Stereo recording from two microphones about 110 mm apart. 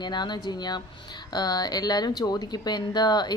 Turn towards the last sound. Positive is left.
turn(degrees=40)  # may be behind; listen again after turning